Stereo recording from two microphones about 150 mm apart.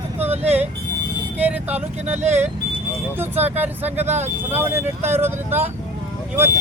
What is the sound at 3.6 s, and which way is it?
Speech, 10° right (ahead or behind).